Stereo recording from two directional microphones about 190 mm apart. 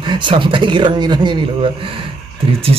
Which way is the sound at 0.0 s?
25° right (ahead or behind).